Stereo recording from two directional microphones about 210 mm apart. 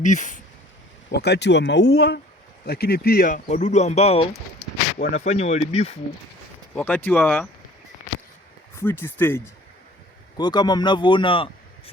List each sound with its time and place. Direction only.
0.0 s speech: 35° left (ahead or behind)
1.1 s speech: 50° left (ahead or behind); by 6.0 s 30° left (ahead or behind)
6.7 s speech: 5° left (ahead or behind)
8.7 s speech: 10° left (ahead or behind)